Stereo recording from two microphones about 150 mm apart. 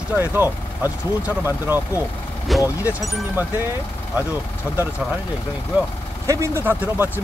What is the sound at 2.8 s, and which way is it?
Speech, 10° right (ahead or behind).